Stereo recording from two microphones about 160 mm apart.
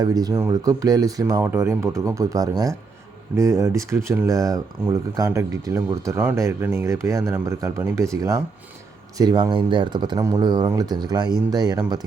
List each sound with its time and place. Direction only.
0.0 s speech: 25° right (ahead or behind)